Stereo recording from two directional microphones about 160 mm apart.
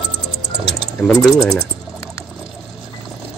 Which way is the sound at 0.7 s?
Centre (ahead or behind).